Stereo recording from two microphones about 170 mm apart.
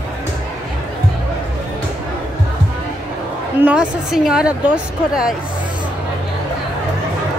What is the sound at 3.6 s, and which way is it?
Speech, 5° right (ahead or behind).